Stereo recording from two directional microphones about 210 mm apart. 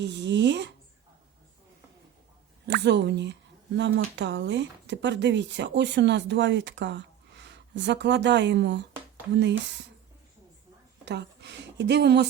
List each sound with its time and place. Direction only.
0.0 s speech: 55° right (ahead or behind)
2.6 s speech: 55° right (ahead or behind)
11.0 s speech: 55° right (ahead or behind)